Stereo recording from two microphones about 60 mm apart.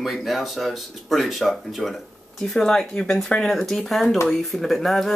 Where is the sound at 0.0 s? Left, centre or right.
Centre.